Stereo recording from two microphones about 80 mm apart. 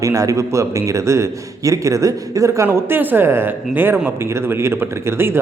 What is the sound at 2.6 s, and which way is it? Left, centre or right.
Speech, right.